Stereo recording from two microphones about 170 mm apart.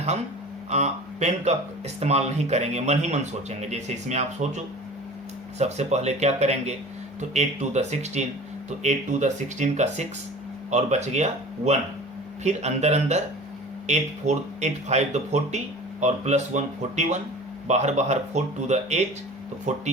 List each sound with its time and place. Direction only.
0.7 s speech: 40° right (ahead or behind)